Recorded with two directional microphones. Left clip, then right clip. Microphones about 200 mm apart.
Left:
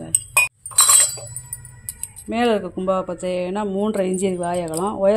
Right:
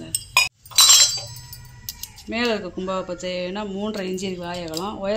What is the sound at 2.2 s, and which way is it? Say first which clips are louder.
Speech: left 4 dB; 45° left (ahead or behind).